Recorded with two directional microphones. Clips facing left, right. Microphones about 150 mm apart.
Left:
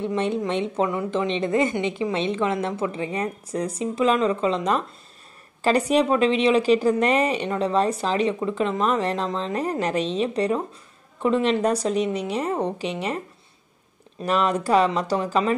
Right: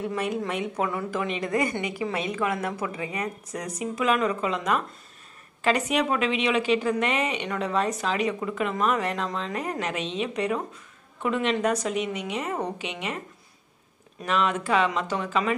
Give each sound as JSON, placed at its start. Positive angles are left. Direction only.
{"t": 0.0, "sound": "a woman's voice", "side_deg": 25}
{"t": 14.2, "sound": "a woman's voice", "side_deg": 35}